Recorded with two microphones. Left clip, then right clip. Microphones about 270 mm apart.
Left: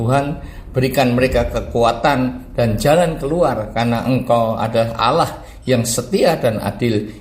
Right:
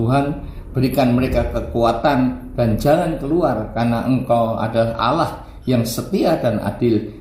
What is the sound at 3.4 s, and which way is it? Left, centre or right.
A man's voice, left.